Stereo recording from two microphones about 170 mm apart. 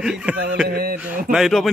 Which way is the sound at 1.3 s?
Centre (ahead or behind).